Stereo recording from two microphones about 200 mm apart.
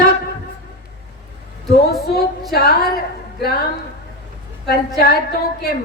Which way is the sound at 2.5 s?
50° left (ahead or behind).